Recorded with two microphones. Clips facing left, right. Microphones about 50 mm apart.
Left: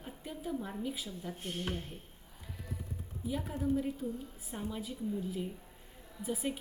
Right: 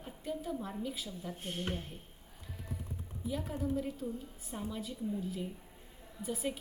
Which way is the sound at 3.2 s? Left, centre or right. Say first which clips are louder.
Left 2 dB; centre.